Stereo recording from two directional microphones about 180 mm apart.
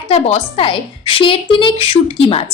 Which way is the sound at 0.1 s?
30° left (ahead or behind).